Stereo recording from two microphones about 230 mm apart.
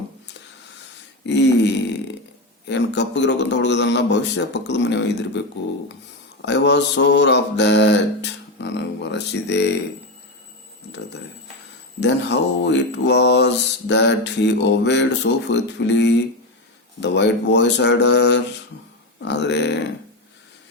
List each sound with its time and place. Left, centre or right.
1.2 s a sound: left
2.6 s mantra: left
6.4 s mantra: left
11.9 s mantra: left